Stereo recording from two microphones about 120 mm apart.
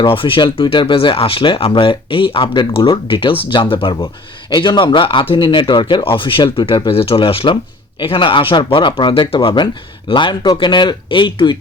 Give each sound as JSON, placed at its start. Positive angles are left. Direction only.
{"t": 0.0, "sound": "speech", "side_deg": 45}